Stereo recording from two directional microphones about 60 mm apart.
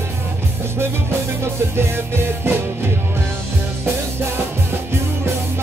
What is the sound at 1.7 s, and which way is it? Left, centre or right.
Music, right.